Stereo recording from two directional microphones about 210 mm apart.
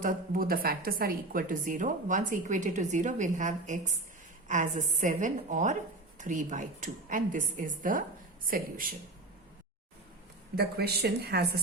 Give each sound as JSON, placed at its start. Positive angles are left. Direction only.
{"t": 0.0, "sound": "a woman's voice", "side_deg": -40}
{"t": 10.6, "sound": "speech", "side_deg": -50}